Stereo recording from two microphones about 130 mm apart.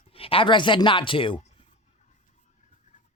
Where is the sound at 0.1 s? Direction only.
45° left (ahead or behind).